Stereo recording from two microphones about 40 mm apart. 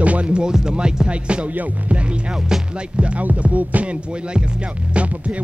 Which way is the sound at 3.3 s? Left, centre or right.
Right.